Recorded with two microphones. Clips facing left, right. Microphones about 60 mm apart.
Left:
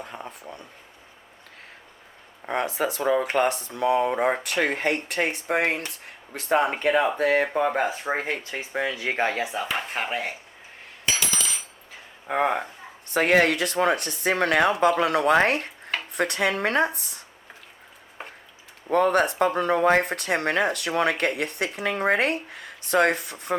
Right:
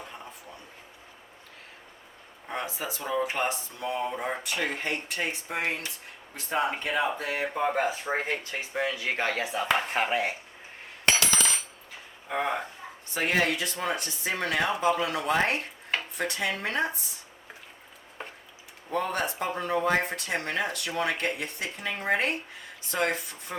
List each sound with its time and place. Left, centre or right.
2.5 s speech: left
7.7 s speech: left
9.7 s speech: centre
11.0 s coin: right
12.3 s speech: left
13.1 s speech: left
18.9 s speech: left